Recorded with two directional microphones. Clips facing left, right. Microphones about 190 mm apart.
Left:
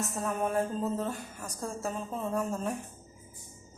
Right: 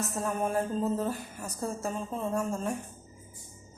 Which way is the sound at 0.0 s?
Centre (ahead or behind).